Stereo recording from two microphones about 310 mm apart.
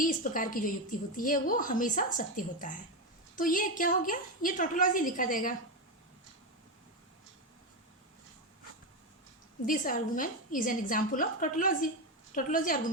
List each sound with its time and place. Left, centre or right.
0.0 s a woman's voice: left
9.6 s a woman's voice: left